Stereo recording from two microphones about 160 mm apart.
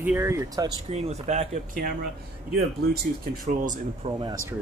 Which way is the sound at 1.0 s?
40° right (ahead or behind).